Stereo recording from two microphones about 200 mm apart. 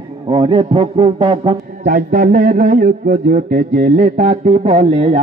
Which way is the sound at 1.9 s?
40° right (ahead or behind).